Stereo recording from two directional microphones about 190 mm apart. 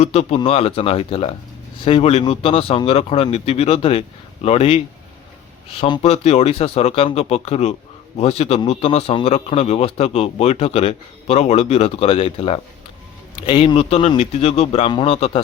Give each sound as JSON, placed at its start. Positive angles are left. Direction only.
{"t": 0.0, "sound": "a man's voice", "side_deg": 35}
{"t": 5.8, "sound": "a man's voice", "side_deg": 30}